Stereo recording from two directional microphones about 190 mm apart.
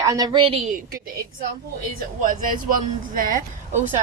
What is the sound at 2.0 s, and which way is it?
Speech, 45° right (ahead or behind).